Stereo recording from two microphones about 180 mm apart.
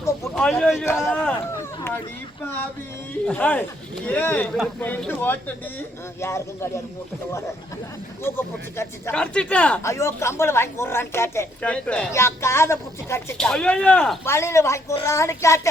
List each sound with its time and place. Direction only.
0.3 s speech: 5° left (ahead or behind)
3.2 s speech: 10° left (ahead or behind)
8.2 s speech: 15° left (ahead or behind)
13.3 s speech: 5° left (ahead or behind)